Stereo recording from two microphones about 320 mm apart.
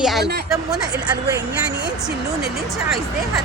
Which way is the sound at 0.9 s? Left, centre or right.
Right.